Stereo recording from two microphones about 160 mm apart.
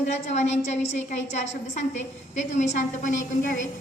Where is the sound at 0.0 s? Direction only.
45° left (ahead or behind).